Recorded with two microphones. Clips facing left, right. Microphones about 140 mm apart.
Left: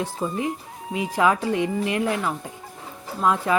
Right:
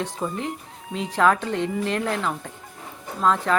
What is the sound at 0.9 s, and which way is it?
Speech, 10° left (ahead or behind).